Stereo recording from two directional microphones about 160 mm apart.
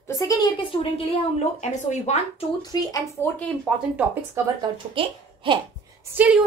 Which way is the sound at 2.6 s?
25° left (ahead or behind).